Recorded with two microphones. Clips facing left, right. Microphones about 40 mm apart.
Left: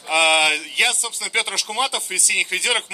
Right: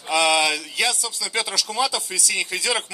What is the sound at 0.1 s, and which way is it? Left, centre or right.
A man's voice, left.